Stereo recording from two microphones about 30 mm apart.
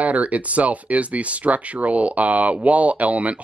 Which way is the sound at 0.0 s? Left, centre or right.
Right.